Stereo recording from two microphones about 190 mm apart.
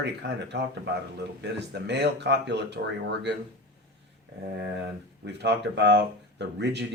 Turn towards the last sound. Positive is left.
turn(degrees=-65)  # may be behind; listen again after turning